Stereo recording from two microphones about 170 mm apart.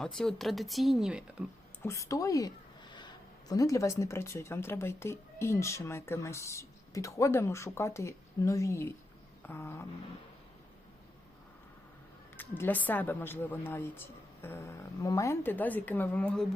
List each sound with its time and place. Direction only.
0.0 s speech: centre (ahead or behind)
1.8 s a sound: 15° left (ahead or behind)
3.5 s speech: 20° left (ahead or behind)
9.4 s vehicle: 15° left (ahead or behind)
12.4 s speech: 10° left (ahead or behind)